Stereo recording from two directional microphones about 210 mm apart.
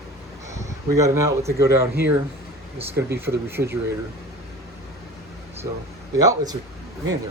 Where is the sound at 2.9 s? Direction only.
10° right (ahead or behind).